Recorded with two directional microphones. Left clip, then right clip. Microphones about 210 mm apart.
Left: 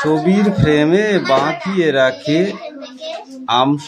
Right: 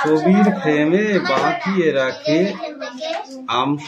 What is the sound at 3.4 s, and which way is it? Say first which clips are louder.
Speech: left 6 dB; 25° left (ahead or behind).